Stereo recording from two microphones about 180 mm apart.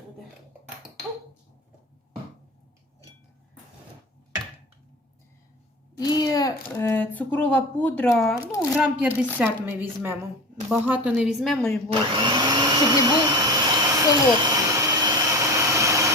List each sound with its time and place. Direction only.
6.1 s a sound: 20° left (ahead or behind)
6.7 s speech: 15° left (ahead or behind)
8.7 s a woman's voice: 10° right (ahead or behind)
11.9 s vacuum cleaner: 25° right (ahead or behind)